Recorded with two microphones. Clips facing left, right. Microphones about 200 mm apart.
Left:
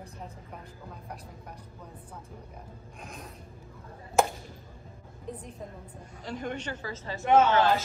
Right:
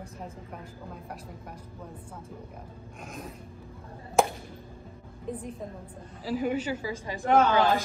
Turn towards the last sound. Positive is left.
turn(degrees=25)  # may be behind; listen again after turning